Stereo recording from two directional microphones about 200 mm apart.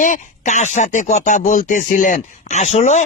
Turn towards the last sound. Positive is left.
turn(degrees=35)  # may be behind; listen again after turning